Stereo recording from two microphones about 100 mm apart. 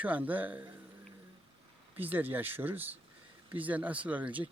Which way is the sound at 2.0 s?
20° right (ahead or behind).